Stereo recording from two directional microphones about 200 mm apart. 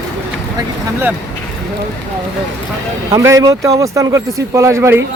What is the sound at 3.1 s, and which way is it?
Speech, 15° right (ahead or behind).